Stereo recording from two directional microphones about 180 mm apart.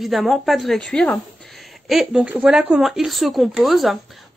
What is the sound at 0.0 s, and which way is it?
A woman's voice, centre (ahead or behind).